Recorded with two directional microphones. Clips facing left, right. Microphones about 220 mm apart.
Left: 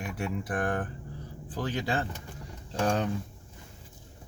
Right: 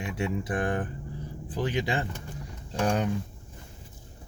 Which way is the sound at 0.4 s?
15° right (ahead or behind).